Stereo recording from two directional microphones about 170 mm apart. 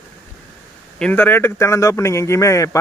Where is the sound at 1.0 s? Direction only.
10° left (ahead or behind).